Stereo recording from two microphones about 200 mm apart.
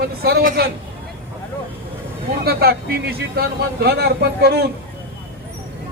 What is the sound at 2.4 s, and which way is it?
A man's voice, 50° right (ahead or behind).